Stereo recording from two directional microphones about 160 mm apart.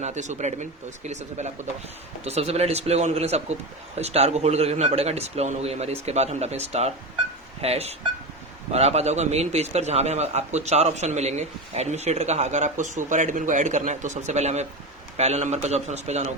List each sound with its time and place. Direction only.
0.0 s a man's voice: 45° right (ahead or behind)